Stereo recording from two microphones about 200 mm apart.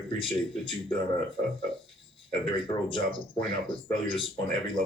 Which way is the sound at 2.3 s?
25° left (ahead or behind).